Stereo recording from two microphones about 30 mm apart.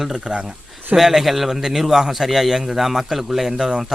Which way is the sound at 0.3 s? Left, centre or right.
Centre.